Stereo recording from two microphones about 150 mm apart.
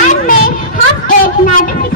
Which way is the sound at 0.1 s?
60° left (ahead or behind).